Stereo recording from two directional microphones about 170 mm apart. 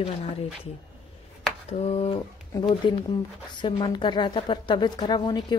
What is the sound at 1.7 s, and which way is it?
A woman's voice, 35° left (ahead or behind).